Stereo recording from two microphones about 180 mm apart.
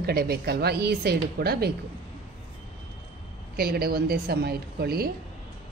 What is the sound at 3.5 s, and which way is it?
A woman's voice, 55° right (ahead or behind).